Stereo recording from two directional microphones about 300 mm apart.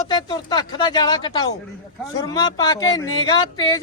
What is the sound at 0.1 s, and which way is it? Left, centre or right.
Speech, centre.